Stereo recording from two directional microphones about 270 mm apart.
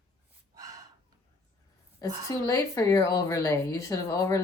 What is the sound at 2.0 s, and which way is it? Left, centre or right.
A woman's voice, centre.